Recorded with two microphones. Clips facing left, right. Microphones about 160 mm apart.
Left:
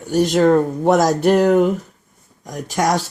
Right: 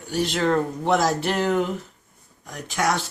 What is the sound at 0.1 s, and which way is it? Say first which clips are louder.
Speech: left 8 dB; 45° left (ahead or behind).